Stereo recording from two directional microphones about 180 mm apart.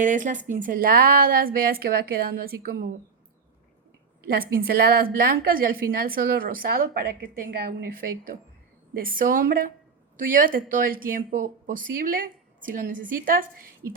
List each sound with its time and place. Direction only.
0.0 s speech: 45° right (ahead or behind)
0.3 s speech: 10° right (ahead or behind)
0.6 s a woman's voice: 50° right (ahead or behind)
4.3 s a woman's voice: 55° right (ahead or behind)
13.8 s speech: 15° right (ahead or behind)